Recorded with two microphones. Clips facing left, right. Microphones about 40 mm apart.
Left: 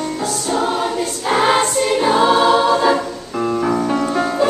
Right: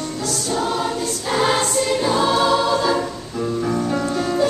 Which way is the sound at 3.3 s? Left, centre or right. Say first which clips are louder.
Left 4 dB; left.